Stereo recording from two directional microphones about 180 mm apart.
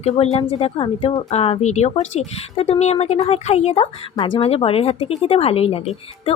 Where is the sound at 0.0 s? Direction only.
35° left (ahead or behind).